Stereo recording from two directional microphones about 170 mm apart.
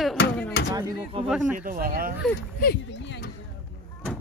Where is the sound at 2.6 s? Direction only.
75° left (ahead or behind).